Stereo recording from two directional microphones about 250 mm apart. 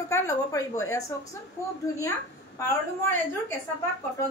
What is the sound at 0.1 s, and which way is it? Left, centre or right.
A woman's voice, centre.